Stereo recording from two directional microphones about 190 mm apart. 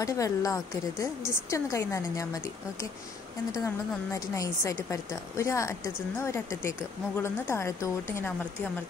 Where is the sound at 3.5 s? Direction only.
15° left (ahead or behind).